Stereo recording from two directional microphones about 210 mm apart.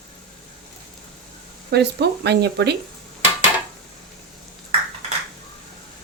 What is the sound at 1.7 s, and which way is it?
Speech, 55° right (ahead or behind).